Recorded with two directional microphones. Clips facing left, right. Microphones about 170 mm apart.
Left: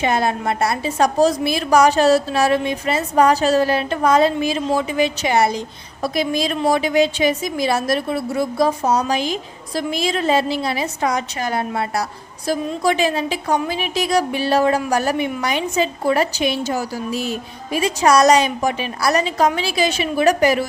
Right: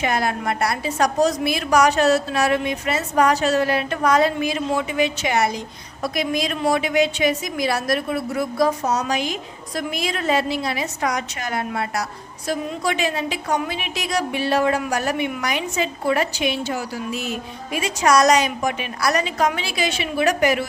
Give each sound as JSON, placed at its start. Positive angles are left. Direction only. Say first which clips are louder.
{"t": 0.0, "sound": "a woman's voice", "louder": "left 3 dB", "side_deg": 25}